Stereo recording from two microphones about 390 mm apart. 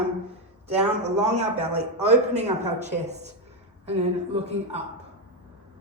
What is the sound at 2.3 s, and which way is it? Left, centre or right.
A woman's voice, centre.